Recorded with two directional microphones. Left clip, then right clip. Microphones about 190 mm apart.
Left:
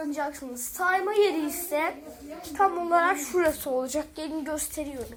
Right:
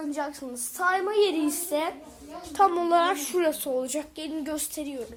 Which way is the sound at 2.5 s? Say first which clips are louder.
Right 2 dB; 50° right (ahead or behind).